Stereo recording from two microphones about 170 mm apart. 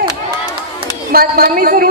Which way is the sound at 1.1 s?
60° right (ahead or behind).